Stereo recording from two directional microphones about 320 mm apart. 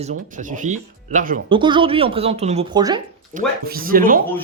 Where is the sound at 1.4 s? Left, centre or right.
Centre.